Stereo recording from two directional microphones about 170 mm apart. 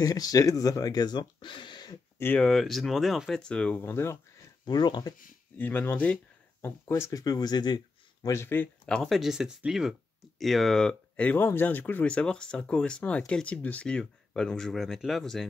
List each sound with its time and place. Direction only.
0.0 s speech: 20° left (ahead or behind)
2.2 s speech: 5° left (ahead or behind)
4.6 s speech: 25° left (ahead or behind)
5.6 s speech: 10° left (ahead or behind)